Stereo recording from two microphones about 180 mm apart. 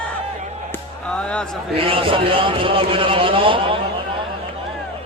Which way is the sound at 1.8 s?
30° right (ahead or behind).